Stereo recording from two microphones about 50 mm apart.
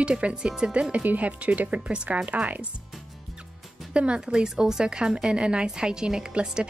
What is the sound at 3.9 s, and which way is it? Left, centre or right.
A woman's voice, centre.